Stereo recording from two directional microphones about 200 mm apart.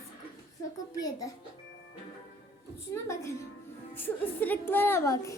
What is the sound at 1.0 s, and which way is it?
Speech, 20° left (ahead or behind).